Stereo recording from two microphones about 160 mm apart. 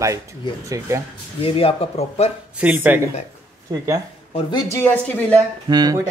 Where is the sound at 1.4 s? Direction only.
35° left (ahead or behind).